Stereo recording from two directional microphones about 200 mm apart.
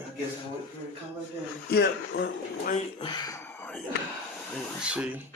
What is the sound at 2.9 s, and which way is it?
Speech, 20° left (ahead or behind).